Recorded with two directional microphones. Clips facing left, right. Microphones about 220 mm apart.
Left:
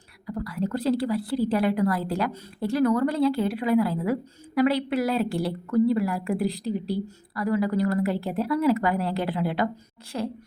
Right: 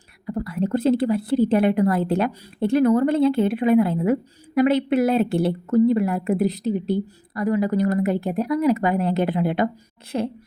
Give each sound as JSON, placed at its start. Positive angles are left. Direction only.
{"t": 0.3, "sound": "a woman's voice", "side_deg": -25}